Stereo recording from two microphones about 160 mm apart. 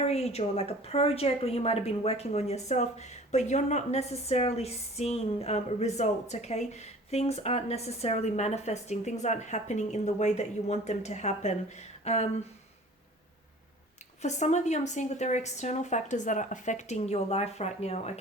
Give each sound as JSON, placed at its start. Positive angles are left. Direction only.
{"t": 0.0, "sound": "a woman's voice", "side_deg": 40}
{"t": 14.2, "sound": "a woman's voice", "side_deg": 45}